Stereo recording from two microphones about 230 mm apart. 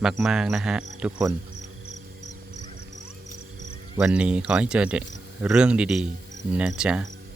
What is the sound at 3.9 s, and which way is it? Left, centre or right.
Speech, centre.